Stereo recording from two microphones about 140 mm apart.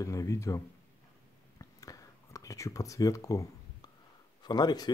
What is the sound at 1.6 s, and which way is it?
Whispering, 25° left (ahead or behind).